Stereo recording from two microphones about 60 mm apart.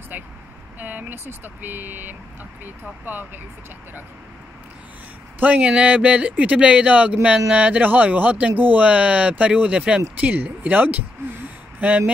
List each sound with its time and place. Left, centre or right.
0.7 s speech: right
5.4 s speech: right